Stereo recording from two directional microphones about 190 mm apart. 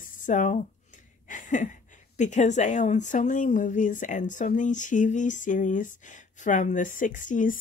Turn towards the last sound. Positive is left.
turn(degrees=40)  # may be behind; listen again after turning